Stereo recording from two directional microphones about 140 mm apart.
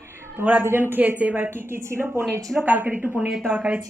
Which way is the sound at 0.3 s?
10° right (ahead or behind).